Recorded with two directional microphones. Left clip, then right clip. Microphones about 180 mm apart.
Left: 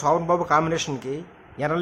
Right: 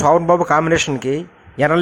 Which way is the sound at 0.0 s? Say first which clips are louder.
Right 8 dB; 35° right (ahead or behind).